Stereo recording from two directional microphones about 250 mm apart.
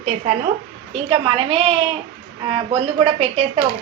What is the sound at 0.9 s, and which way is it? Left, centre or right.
A woman's voice, right.